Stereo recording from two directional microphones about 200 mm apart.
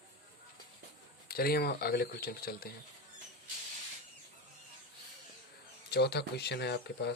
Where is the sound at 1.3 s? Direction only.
50° left (ahead or behind).